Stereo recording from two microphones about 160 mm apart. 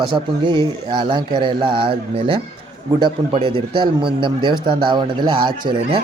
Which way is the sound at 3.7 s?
30° right (ahead or behind).